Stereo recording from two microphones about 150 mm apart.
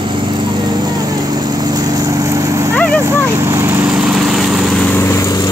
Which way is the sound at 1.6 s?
25° right (ahead or behind).